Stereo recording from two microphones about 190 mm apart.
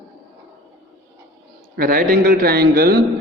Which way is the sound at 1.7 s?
50° right (ahead or behind).